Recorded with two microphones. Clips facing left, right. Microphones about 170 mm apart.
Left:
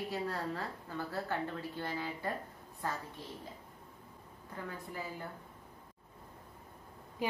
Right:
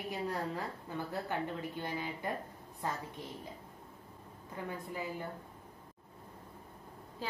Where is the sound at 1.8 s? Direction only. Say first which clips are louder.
Left 3 dB; 15° right (ahead or behind).